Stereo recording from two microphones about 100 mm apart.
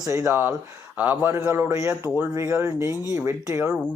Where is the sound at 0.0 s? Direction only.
30° right (ahead or behind).